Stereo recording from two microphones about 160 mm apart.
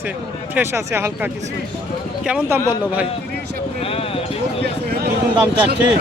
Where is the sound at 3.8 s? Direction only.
35° left (ahead or behind).